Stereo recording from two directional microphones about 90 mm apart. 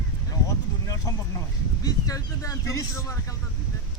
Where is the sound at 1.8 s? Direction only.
40° left (ahead or behind).